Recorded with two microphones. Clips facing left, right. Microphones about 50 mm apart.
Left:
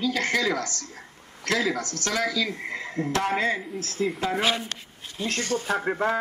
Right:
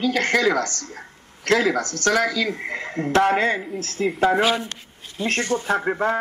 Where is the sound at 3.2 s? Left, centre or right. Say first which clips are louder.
Right 7 dB; right.